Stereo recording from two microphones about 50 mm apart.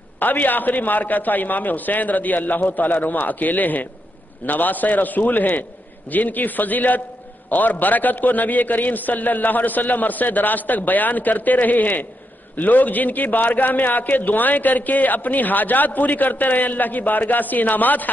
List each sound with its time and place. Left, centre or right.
0.2 s a man's voice: left